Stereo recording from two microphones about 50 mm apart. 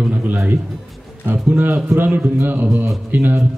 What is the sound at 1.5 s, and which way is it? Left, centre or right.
Speech, right.